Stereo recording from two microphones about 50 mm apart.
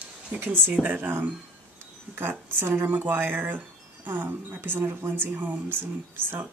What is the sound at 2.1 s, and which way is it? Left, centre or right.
Speech, right.